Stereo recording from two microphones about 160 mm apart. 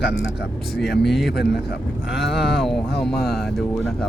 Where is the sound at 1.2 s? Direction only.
90° left.